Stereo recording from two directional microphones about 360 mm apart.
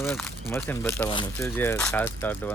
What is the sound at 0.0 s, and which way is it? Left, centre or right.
Speech, centre.